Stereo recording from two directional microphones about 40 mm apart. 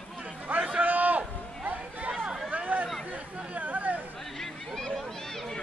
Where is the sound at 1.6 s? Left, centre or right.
Right.